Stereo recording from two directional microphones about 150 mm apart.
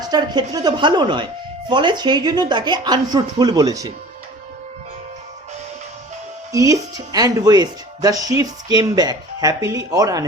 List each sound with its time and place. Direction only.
0.0 s speech: 25° right (ahead or behind)
6.5 s speech: 20° right (ahead or behind)